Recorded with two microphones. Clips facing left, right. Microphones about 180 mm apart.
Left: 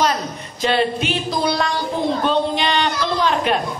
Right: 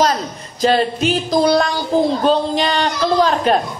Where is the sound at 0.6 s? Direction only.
40° right (ahead or behind).